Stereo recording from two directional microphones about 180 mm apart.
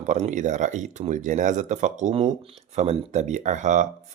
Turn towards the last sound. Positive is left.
turn(degrees=-45)  # may be behind; listen again after turning